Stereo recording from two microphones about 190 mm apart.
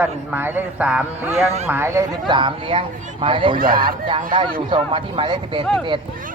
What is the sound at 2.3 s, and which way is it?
Speech, 25° right (ahead or behind).